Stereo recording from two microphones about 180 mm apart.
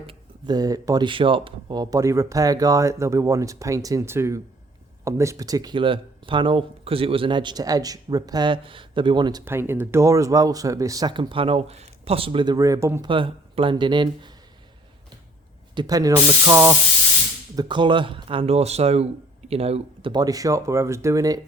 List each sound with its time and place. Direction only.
0.0 s speech: 25° right (ahead or behind)
9.4 s speech: 15° right (ahead or behind)
13.1 s speech: 30° right (ahead or behind)
15.7 s speech: 25° right (ahead or behind)